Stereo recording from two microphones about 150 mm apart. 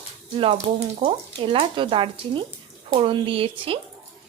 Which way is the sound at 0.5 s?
45° right (ahead or behind).